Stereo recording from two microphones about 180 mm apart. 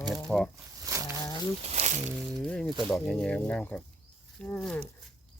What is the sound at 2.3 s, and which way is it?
Speech, 5° left (ahead or behind).